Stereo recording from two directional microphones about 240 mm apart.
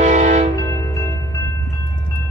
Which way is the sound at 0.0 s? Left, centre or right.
Right.